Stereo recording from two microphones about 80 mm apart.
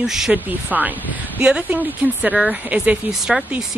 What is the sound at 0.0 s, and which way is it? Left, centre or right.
Speech, centre.